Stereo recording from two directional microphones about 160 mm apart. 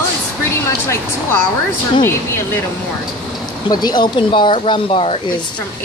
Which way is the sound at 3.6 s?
25° left (ahead or behind).